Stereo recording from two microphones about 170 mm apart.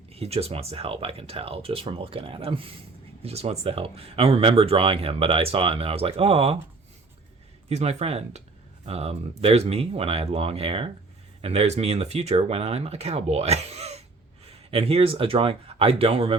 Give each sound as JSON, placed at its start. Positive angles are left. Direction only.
{"t": 0.1, "sound": "speech", "side_deg": -35}
{"t": 7.7, "sound": "speech", "side_deg": -40}